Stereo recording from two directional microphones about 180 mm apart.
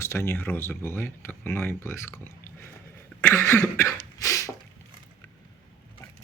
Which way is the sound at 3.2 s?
10° left (ahead or behind).